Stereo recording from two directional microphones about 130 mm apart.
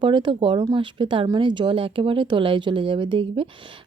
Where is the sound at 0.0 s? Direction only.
40° right (ahead or behind).